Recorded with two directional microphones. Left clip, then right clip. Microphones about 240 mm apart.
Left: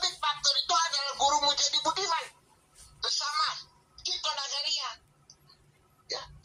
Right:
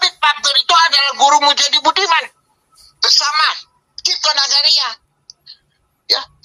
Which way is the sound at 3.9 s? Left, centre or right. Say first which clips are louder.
Right 17 dB; right.